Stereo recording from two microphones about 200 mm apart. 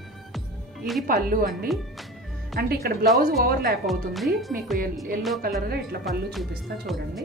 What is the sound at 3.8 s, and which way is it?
Speech, centre (ahead or behind).